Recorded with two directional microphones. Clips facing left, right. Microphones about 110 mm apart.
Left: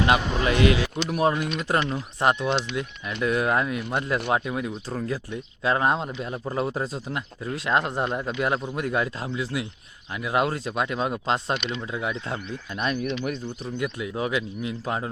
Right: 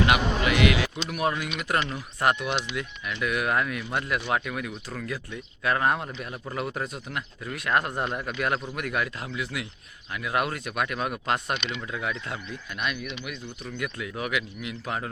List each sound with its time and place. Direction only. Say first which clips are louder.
0.0 s speech: left 1 dB; 30° left (ahead or behind)
13.7 s speech: left 4 dB; 25° left (ahead or behind)